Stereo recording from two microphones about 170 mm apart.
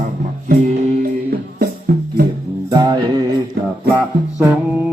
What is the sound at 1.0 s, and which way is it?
Music, 60° right (ahead or behind).